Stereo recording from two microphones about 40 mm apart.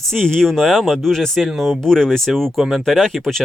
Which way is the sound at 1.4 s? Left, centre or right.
Centre.